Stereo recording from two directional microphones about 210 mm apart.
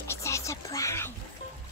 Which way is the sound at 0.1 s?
15° left (ahead or behind).